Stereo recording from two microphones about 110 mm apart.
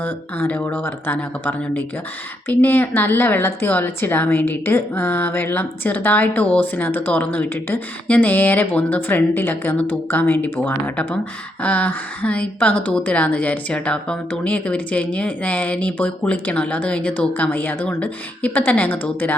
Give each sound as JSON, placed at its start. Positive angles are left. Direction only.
{"t": 0.0, "sound": "speech", "side_deg": 15}